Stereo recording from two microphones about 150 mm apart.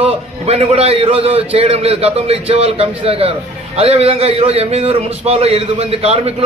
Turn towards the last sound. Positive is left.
turn(degrees=-40)  # may be behind; listen again after turning